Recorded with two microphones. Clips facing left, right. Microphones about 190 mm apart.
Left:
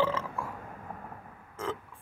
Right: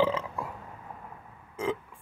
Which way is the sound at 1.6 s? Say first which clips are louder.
Right 5 dB; 15° right (ahead or behind).